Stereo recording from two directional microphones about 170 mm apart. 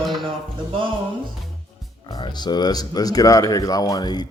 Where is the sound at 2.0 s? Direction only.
25° left (ahead or behind).